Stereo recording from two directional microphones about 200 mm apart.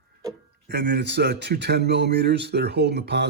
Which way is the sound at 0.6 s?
55° right (ahead or behind).